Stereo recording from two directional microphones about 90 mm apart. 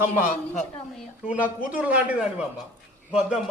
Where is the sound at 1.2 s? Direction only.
15° right (ahead or behind).